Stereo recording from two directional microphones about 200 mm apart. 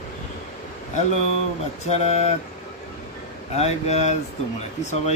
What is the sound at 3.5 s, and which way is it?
Speech, 35° left (ahead or behind).